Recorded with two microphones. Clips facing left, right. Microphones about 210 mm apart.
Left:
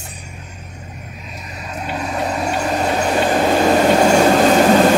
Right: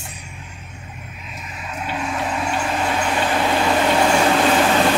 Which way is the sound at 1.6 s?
40° left (ahead or behind).